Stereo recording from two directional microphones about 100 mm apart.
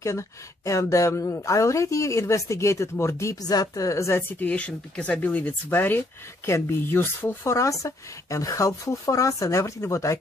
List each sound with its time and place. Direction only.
0.0 s speech: 30° left (ahead or behind)